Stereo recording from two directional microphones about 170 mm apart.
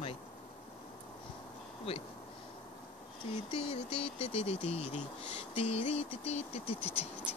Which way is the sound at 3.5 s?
35° left (ahead or behind).